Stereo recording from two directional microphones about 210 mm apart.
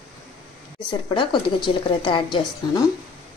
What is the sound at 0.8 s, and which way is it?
Speech, 20° left (ahead or behind).